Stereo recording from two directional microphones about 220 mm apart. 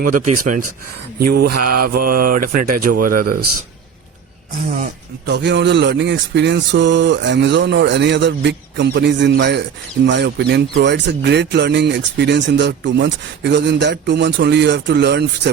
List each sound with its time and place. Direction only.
0.0 s speech: 40° right (ahead or behind)
4.7 s speech: 45° right (ahead or behind)